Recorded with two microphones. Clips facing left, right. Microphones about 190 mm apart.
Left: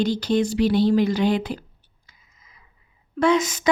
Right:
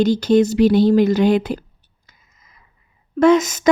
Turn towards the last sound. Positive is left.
turn(degrees=-45)  # may be behind; listen again after turning